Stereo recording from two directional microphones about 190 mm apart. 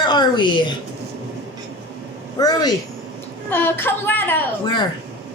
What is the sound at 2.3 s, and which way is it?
A woman's voice, 20° left (ahead or behind).